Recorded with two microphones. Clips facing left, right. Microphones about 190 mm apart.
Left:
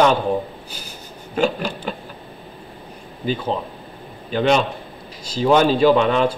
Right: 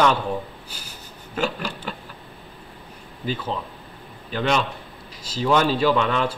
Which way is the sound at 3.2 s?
25° left (ahead or behind).